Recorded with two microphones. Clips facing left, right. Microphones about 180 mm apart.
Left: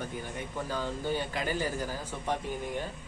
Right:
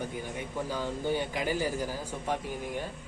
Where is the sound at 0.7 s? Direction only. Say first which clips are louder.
Right 1 dB; 10° right (ahead or behind).